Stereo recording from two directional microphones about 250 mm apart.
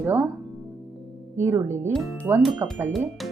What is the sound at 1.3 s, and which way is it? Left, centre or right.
Speech, centre.